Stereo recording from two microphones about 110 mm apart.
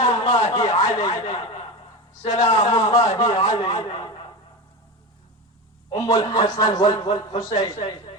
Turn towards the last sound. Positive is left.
turn(degrees=35)  # may be behind; listen again after turning